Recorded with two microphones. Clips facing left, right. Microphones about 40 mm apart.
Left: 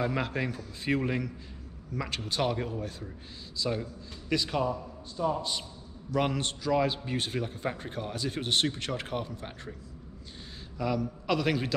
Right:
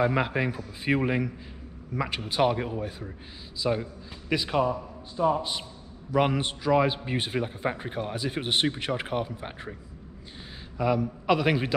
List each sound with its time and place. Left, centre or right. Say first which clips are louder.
0.0 s a man's voice: right 5 dB; centre
10.8 s a man's voice: right 5 dB; right